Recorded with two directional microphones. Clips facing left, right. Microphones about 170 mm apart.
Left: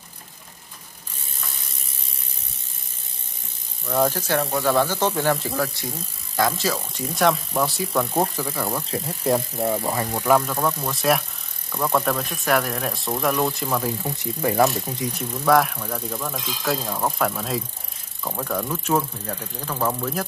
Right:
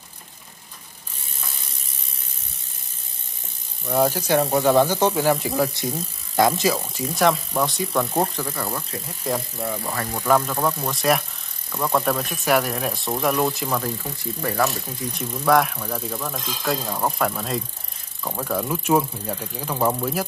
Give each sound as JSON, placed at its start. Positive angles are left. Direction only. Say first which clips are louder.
{"t": 3.8, "sound": "speech", "louder": "right 1 dB", "side_deg": -10}
{"t": 4.4, "sound": "speech", "louder": "right 4 dB", "side_deg": -25}
{"t": 7.2, "sound": "speech", "louder": "even", "side_deg": 0}
{"t": 9.6, "sound": "speech", "louder": "left 5 dB", "side_deg": 30}
{"t": 9.9, "sound": "speech", "louder": "right 1 dB", "side_deg": 10}
{"t": 14.0, "sound": "speech", "louder": "left 3 dB", "side_deg": 20}
{"t": 15.1, "sound": "speech", "louder": "even", "side_deg": 0}